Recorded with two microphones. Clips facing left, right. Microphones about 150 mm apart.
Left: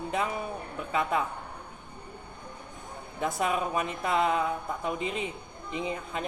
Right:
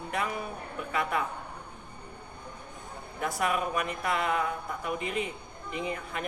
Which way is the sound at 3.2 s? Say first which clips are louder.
Left 1 dB; 25° left (ahead or behind).